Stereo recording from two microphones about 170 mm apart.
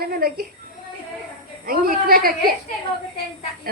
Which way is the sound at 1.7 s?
60° right (ahead or behind).